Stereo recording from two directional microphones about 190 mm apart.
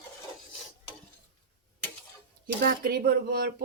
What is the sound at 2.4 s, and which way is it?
Speech, 50° right (ahead or behind).